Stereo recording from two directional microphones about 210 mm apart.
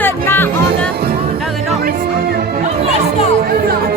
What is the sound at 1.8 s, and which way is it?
Music, 45° right (ahead or behind).